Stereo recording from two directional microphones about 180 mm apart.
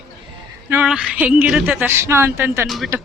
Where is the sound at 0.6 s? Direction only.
10° right (ahead or behind).